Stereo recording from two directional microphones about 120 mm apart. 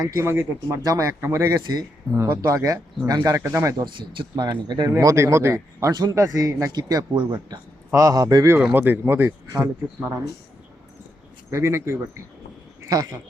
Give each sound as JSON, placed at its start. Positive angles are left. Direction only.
{"t": 0.0, "sound": "speech", "side_deg": -20}
{"t": 3.8, "sound": "speech", "side_deg": -40}
{"t": 4.9, "sound": "speech", "side_deg": -25}
{"t": 5.9, "sound": "speech", "side_deg": -35}
{"t": 11.5, "sound": "speech", "side_deg": -20}